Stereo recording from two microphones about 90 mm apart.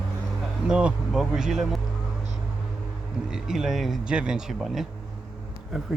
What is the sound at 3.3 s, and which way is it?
Speech, 5° right (ahead or behind).